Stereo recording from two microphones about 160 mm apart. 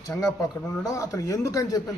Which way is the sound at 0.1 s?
25° left (ahead or behind).